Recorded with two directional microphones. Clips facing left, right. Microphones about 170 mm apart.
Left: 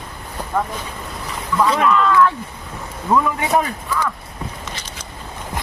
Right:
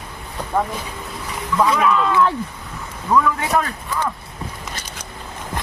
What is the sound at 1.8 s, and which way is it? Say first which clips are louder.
Speech: left 1 dB; 5° right (ahead or behind).